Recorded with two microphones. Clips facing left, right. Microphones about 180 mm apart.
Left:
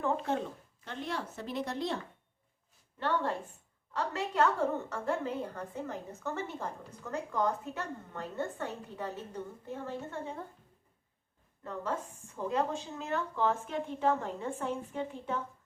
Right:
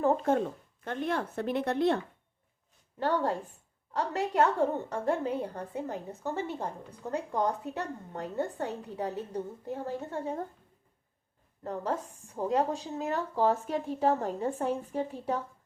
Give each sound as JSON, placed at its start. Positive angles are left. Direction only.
{"t": 0.0, "sound": "speech", "side_deg": -45}
{"t": 3.0, "sound": "a woman's voice", "side_deg": -40}
{"t": 6.2, "sound": "a woman's voice", "side_deg": -35}
{"t": 11.6, "sound": "a woman's voice", "side_deg": -40}